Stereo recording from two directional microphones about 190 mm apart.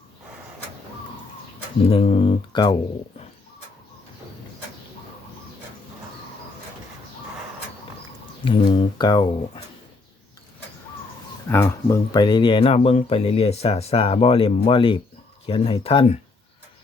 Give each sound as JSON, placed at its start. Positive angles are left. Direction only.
{"t": 1.9, "sound": "speech", "side_deg": 30}
{"t": 8.4, "sound": "speech", "side_deg": 25}
{"t": 11.4, "sound": "speech", "side_deg": 15}